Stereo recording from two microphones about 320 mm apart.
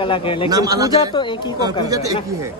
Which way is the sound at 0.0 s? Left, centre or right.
Centre.